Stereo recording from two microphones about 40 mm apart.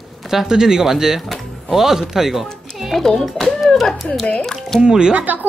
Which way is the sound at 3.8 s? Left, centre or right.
Centre.